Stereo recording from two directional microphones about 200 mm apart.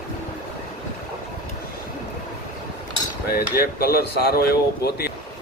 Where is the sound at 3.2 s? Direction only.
50° left (ahead or behind).